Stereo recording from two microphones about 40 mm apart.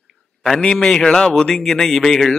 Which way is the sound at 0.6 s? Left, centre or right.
Centre.